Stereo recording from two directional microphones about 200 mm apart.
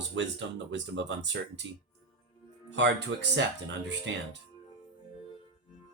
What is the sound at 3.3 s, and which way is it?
Speech, 65° right (ahead or behind).